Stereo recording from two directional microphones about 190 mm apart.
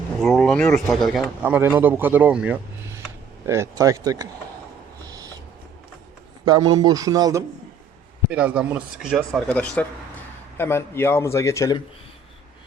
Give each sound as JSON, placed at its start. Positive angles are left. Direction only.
{"t": 0.2, "sound": "speech", "side_deg": 0}
{"t": 5.0, "sound": "a sound", "side_deg": -20}
{"t": 6.4, "sound": "speech", "side_deg": -20}
{"t": 8.3, "sound": "a man's voice", "side_deg": -5}